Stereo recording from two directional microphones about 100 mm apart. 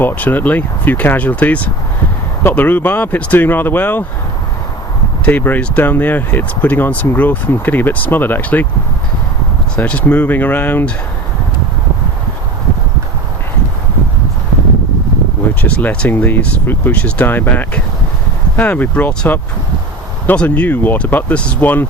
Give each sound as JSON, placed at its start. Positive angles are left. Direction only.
{"t": 0.0, "sound": "speech", "side_deg": 20}
{"t": 5.2, "sound": "speech", "side_deg": 15}
{"t": 9.7, "sound": "speech", "side_deg": 10}
{"t": 15.6, "sound": "speech", "side_deg": 15}